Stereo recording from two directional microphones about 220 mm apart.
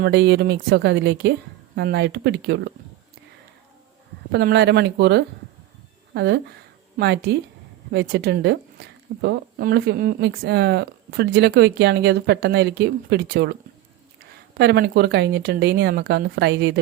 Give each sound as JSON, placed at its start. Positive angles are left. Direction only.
{"t": 0.0, "sound": "speech", "side_deg": -50}
{"t": 4.3, "sound": "speech", "side_deg": -50}
{"t": 14.6, "sound": "speech", "side_deg": -45}